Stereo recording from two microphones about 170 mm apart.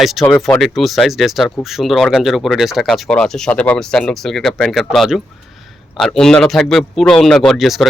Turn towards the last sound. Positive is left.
turn(degrees=0)  # may be behind; listen again after turning